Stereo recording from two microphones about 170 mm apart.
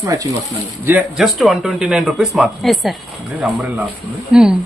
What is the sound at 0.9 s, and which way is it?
Speech, 5° right (ahead or behind).